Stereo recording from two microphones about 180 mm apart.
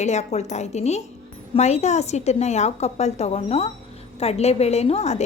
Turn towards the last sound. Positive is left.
turn(degrees=35)  # may be behind; listen again after turning